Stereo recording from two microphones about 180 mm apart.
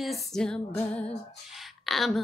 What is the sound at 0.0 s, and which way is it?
Speech, centre (ahead or behind).